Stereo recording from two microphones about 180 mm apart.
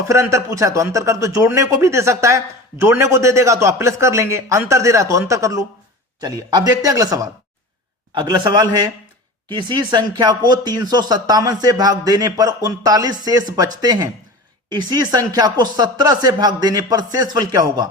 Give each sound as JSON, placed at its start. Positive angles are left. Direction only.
{"t": 0.1, "sound": "a man's voice", "side_deg": -15}